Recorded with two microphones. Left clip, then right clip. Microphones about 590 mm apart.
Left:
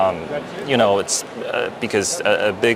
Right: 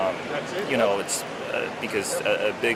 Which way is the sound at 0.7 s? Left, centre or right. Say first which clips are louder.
Left 7 dB; left.